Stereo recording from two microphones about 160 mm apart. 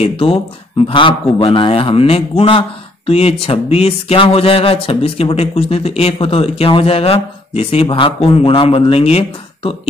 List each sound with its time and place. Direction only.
0.0 s speech: 35° left (ahead or behind)